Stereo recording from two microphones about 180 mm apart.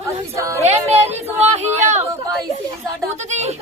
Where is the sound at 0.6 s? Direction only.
35° right (ahead or behind).